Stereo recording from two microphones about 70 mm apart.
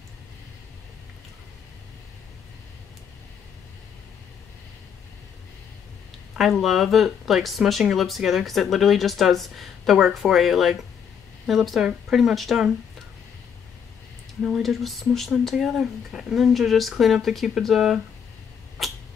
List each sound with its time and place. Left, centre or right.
6.3 s speech: centre
14.4 s speech: centre
18.8 s cat: centre